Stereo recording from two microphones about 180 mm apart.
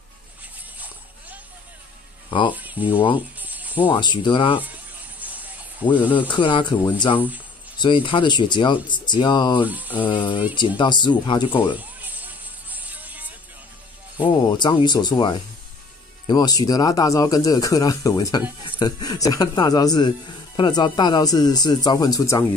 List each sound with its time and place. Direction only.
0.7 s vehicle: 10° right (ahead or behind)
2.5 s speech: 10° right (ahead or behind)
3.3 s snake: 10° right (ahead or behind)
3.9 s speech: 25° left (ahead or behind)
5.2 s music: 10° right (ahead or behind)
6.1 s speech: 25° left (ahead or behind)
7.8 s speech: 25° left (ahead or behind)
9.7 s music: 10° right (ahead or behind)
10.0 s speech: 25° left (ahead or behind)
11.7 s music: 10° right (ahead or behind)
14.1 s speech: 25° left (ahead or behind)